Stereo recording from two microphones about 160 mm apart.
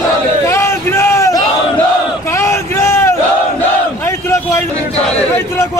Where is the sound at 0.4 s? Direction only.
15° left (ahead or behind).